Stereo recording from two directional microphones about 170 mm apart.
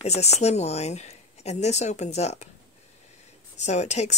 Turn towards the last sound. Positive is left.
turn(degrees=40)  # may be behind; listen again after turning